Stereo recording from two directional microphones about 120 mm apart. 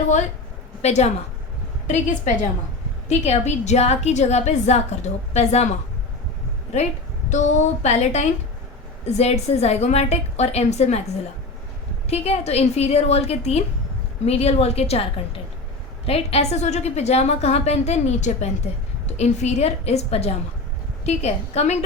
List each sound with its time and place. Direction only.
0.8 s a woman's voice: 65° left (ahead or behind)
1.9 s a woman's voice: 90° left
3.1 s a woman's voice: 65° left (ahead or behind)
7.3 s a woman's voice: 85° left
12.0 s a woman's voice: 60° left (ahead or behind)
16.0 s a woman's voice: 55° left (ahead or behind)